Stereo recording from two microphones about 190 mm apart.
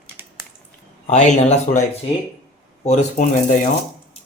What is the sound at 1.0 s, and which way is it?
Speech, 35° left (ahead or behind).